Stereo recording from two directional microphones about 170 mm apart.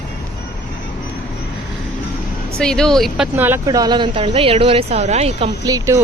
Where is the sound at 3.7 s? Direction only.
25° right (ahead or behind); by 5.5 s 40° right (ahead or behind).